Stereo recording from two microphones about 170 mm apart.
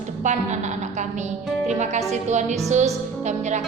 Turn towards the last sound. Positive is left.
turn(degrees=-45)  # may be behind; listen again after turning